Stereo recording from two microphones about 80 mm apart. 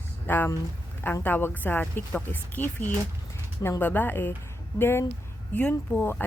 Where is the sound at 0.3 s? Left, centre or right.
Left.